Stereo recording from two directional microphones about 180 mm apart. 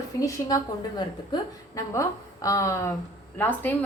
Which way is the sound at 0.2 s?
20° left (ahead or behind).